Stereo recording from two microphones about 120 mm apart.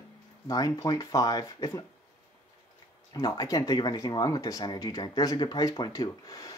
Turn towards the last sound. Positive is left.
turn(degrees=30)  # may be behind; listen again after turning